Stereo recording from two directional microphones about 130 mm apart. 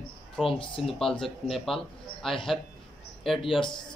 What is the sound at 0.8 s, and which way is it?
A man's voice, 5° left (ahead or behind).